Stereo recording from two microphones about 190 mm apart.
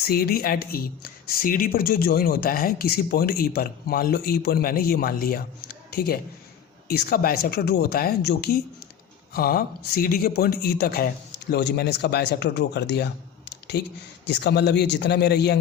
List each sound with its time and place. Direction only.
0.0 s a man's voice: 55° left (ahead or behind)